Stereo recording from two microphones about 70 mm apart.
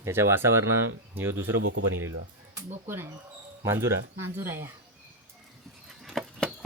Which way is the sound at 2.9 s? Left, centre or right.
Right.